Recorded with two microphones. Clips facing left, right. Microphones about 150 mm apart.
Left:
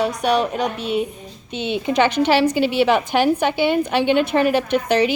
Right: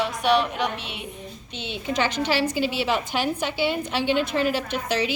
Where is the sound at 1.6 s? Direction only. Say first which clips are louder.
Left 8 dB; 60° left (ahead or behind).